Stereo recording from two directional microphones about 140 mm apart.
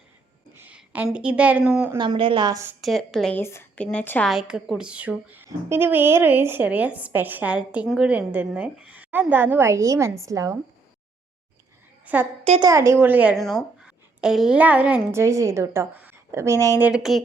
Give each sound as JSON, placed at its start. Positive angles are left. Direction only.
{"t": 0.5, "sound": "speech", "side_deg": -10}
{"t": 2.0, "sound": "a woman's voice", "side_deg": -35}
{"t": 2.8, "sound": "a woman's voice", "side_deg": 0}
{"t": 3.3, "sound": "speech", "side_deg": 15}
{"t": 4.3, "sound": "a woman's voice", "side_deg": -5}
{"t": 12.0, "sound": "a woman's voice", "side_deg": -15}
{"t": 12.5, "sound": "a woman's voice", "side_deg": -25}
{"t": 13.3, "sound": "a woman's voice", "side_deg": 0}
{"t": 15.2, "sound": "a woman's voice", "side_deg": -20}
{"t": 16.8, "sound": "a woman's voice", "side_deg": -5}